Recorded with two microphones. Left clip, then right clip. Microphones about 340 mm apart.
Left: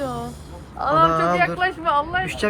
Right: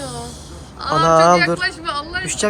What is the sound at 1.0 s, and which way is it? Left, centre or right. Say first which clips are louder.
Speech: right 7 dB; centre.